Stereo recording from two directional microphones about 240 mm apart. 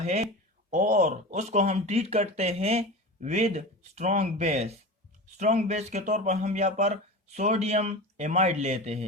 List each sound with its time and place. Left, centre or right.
0.0 s speech: right